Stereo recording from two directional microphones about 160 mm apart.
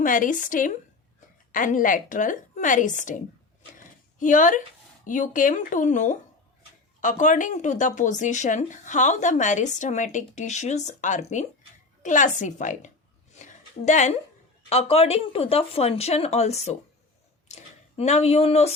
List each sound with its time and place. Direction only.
0.0 s a woman's voice: 55° left (ahead or behind)
13.3 s a sound: 50° left (ahead or behind)
14.7 s speech: 40° left (ahead or behind)